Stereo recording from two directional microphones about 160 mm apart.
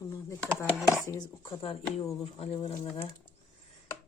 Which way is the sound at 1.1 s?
20° left (ahead or behind).